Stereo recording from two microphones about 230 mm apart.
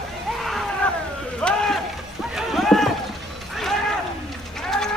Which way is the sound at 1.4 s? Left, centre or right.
Centre.